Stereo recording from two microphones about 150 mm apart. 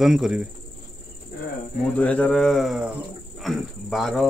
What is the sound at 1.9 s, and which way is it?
Speech, 10° left (ahead or behind).